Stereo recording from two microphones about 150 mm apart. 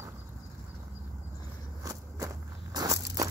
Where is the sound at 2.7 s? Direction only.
25° right (ahead or behind).